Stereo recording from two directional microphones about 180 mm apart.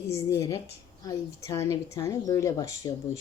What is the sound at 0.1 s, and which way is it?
A woman's voice, 15° left (ahead or behind).